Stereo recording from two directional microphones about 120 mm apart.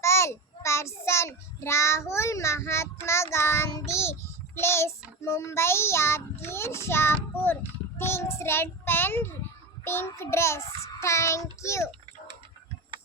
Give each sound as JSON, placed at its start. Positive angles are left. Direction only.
{"t": 0.0, "sound": "child singing", "side_deg": 25}